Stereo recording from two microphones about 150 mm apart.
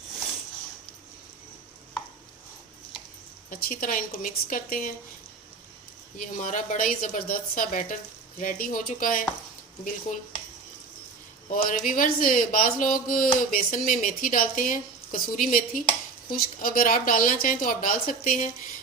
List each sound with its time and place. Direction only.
3.5 s speech: 70° left (ahead or behind)
6.1 s speech: 60° left (ahead or behind)
11.4 s speech: 60° left (ahead or behind)